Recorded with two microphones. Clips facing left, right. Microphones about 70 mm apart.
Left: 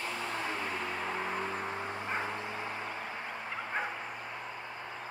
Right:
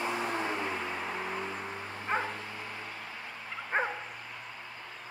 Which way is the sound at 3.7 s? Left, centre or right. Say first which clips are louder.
Right 6 dB; right.